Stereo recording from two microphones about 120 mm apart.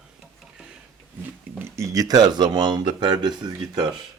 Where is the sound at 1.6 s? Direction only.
20° right (ahead or behind).